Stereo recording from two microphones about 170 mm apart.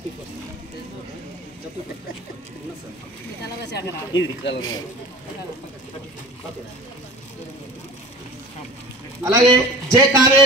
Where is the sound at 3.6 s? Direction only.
90° left.